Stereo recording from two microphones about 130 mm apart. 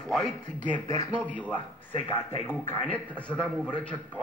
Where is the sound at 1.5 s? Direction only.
40° left (ahead or behind).